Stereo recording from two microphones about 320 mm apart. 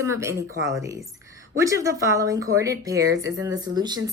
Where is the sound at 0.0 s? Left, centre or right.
Centre.